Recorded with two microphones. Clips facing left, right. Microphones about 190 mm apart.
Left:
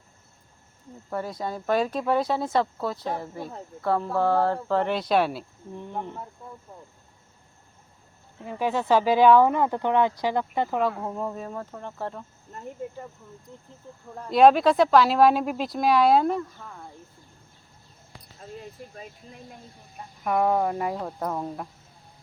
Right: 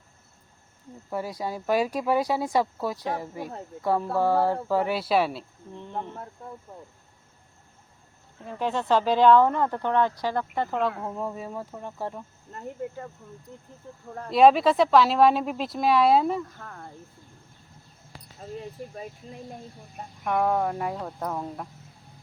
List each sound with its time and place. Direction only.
1.1 s speech: 10° right (ahead or behind)
5.7 s speech: 10° left (ahead or behind)
8.4 s speech: 5° left (ahead or behind); by 12.2 s 10° right (ahead or behind)
14.3 s speech: centre (ahead or behind)
16.6 s speech: 60° right (ahead or behind)
20.2 s speech: 5° left (ahead or behind)